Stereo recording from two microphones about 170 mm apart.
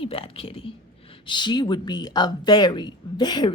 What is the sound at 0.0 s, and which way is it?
Whispering, 35° left (ahead or behind).